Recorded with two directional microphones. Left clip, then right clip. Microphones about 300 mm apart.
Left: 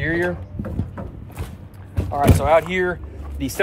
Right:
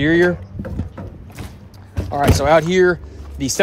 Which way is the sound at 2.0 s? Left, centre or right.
Right.